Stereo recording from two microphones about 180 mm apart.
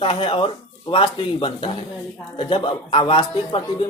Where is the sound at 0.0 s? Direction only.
30° left (ahead or behind).